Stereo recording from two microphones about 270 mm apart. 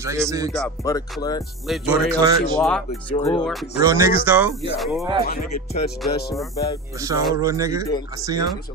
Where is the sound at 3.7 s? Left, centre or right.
Centre.